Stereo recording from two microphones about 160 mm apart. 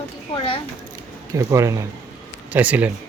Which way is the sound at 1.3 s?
20° right (ahead or behind).